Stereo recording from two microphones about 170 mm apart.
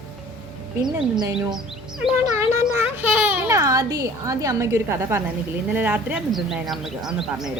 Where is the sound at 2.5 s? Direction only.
15° right (ahead or behind).